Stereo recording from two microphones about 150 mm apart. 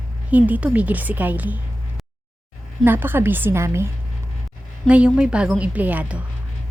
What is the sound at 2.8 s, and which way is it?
A woman's voice, 15° right (ahead or behind).